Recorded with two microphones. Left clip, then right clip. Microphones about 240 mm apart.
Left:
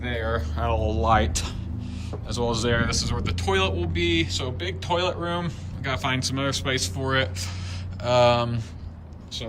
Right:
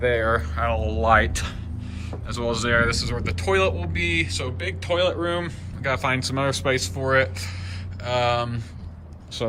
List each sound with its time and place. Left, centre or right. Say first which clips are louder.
0.0 s speech: right 7 dB; centre
4.9 s speech: right 5 dB; centre
5.8 s speech: right 3 dB; centre
8.0 s speech: left 3 dB; centre